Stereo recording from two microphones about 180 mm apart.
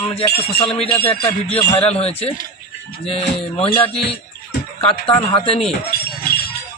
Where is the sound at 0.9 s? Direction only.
30° left (ahead or behind).